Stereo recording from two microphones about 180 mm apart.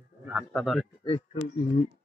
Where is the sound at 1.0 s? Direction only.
35° left (ahead or behind).